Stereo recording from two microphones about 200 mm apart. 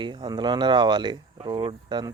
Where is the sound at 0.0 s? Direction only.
20° right (ahead or behind).